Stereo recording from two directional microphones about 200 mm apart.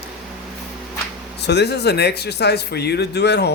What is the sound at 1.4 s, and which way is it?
Speech, 55° left (ahead or behind).